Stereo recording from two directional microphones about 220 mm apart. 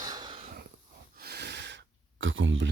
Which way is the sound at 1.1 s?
45° right (ahead or behind).